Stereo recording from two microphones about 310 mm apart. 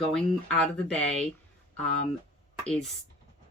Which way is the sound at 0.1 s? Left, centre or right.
Centre.